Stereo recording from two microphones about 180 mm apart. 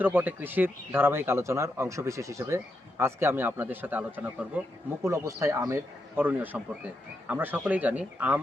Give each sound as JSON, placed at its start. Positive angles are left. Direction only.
{"t": 0.0, "sound": "speech", "side_deg": -10}